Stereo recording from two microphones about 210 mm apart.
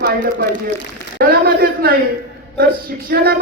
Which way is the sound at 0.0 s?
45° right (ahead or behind).